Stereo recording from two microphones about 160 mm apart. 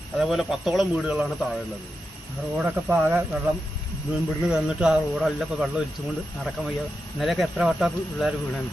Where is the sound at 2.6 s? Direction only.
10° right (ahead or behind).